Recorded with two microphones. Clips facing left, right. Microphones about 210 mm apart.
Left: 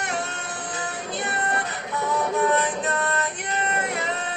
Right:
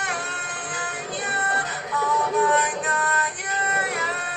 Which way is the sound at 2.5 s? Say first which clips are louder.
Left 1 dB; 25° left (ahead or behind).